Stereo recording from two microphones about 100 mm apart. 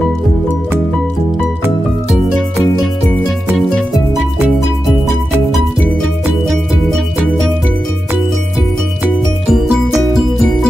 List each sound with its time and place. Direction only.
9.5 s music: 5° right (ahead or behind)